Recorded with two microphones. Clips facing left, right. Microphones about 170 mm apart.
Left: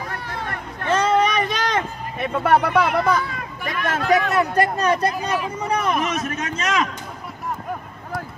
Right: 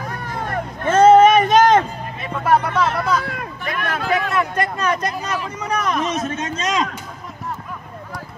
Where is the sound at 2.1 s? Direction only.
60° left (ahead or behind).